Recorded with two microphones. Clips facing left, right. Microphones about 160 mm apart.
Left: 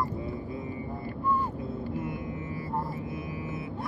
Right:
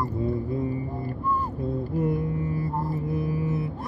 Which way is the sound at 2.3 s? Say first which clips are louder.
Right 5 dB; 40° right (ahead or behind).